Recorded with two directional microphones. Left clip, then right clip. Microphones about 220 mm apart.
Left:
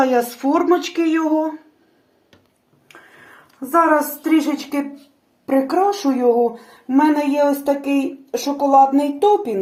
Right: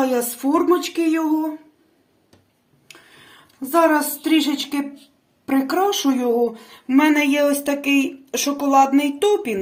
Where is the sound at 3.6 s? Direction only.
40° right (ahead or behind).